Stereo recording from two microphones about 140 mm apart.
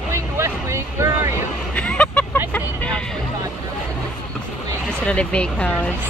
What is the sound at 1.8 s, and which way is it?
Vehicle, 10° left (ahead or behind).